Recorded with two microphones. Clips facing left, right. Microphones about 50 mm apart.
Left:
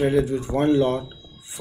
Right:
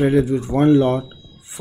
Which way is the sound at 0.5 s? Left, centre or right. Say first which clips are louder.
Right 5 dB; right.